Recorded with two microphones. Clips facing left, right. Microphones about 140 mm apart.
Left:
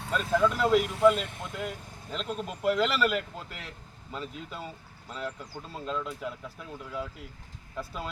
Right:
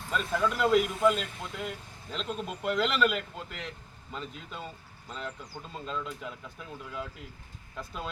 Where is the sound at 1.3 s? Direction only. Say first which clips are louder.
Left 2 dB; 50° left (ahead or behind).